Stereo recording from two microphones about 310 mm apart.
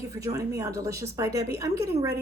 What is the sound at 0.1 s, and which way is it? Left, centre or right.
A woman's voice, centre.